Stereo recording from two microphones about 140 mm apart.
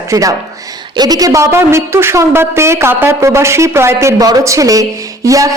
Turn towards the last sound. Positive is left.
turn(degrees=-25)  # may be behind; listen again after turning